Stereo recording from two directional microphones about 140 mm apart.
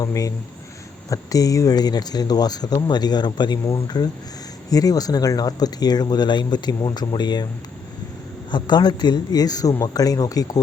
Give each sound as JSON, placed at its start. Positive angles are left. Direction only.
{"t": 0.0, "sound": "speech", "side_deg": 25}
{"t": 8.4, "sound": "a man's voice", "side_deg": 30}